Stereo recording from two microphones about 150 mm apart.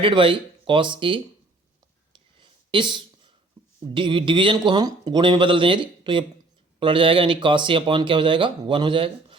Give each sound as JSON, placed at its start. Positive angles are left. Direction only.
{"t": 0.0, "sound": "speech", "side_deg": -35}
{"t": 2.1, "sound": "a sound", "side_deg": -35}
{"t": 3.9, "sound": "speech", "side_deg": -35}